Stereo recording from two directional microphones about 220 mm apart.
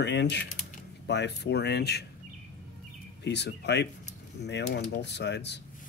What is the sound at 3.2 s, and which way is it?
Speech, 50° left (ahead or behind).